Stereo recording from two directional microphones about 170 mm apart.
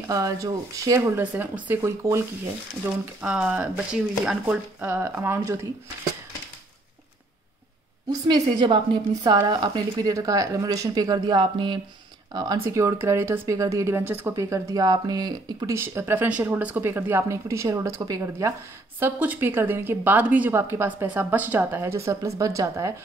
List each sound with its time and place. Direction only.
0.1 s speech: 20° right (ahead or behind)
8.1 s a woman's voice: 25° right (ahead or behind)